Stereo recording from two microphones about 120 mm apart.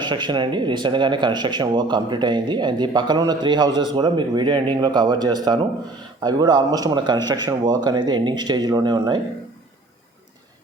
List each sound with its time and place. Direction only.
0.0 s speech: 40° right (ahead or behind)